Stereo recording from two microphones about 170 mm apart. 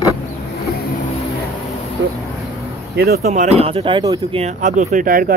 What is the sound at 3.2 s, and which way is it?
Speech, 45° right (ahead or behind).